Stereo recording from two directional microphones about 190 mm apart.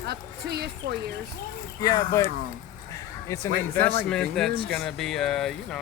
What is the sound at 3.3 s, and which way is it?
Speech, 10° left (ahead or behind).